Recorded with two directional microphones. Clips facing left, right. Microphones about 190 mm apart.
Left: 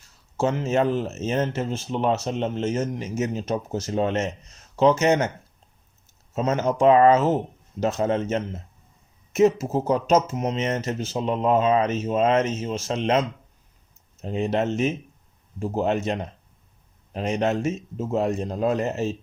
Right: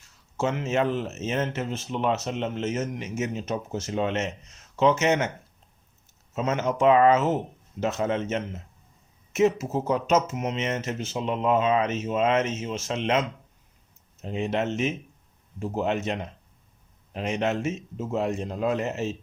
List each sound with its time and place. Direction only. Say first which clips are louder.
0.3 s speech: left 3 dB; 35° left (ahead or behind)
6.3 s speech: left 3 dB; 35° left (ahead or behind)